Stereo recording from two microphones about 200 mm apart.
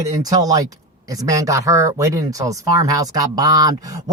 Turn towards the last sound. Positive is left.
turn(degrees=-20)  # may be behind; listen again after turning